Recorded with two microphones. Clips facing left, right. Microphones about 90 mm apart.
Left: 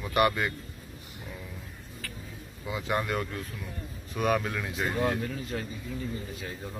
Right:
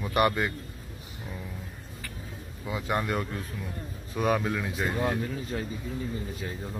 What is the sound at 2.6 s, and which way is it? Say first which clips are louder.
Speech: right 1 dB; centre (ahead or behind).